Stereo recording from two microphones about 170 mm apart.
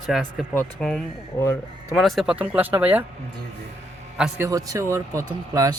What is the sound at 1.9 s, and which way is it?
Speech, centre (ahead or behind).